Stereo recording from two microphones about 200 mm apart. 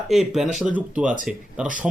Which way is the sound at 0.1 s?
Centre (ahead or behind).